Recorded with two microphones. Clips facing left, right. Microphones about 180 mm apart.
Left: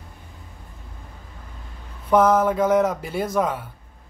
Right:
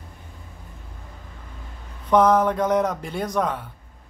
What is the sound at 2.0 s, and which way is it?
A man's voice, 5° left (ahead or behind).